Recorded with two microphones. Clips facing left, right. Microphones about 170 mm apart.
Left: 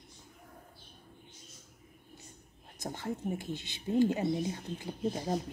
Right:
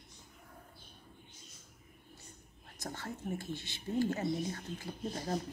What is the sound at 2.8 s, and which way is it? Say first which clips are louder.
Speech: left 5 dB; 15° left (ahead or behind).